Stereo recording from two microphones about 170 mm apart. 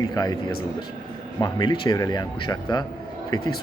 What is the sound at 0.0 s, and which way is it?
Speech, 25° left (ahead or behind).